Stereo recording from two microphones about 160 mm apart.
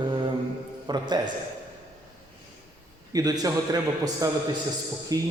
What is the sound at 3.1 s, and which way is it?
A man's voice, 25° right (ahead or behind).